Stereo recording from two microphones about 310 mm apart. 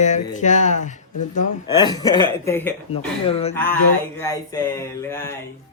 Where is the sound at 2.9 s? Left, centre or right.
Centre.